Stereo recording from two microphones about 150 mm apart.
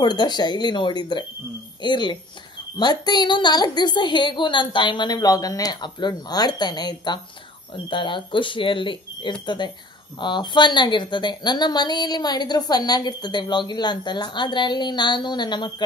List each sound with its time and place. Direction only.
0.0 s a woman's voice: 30° left (ahead or behind)